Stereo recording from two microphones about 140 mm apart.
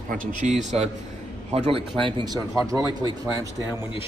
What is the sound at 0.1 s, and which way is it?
A man's voice, 65° right (ahead or behind).